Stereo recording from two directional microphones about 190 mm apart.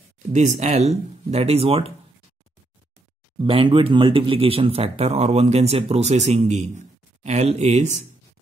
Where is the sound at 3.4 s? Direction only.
25° right (ahead or behind).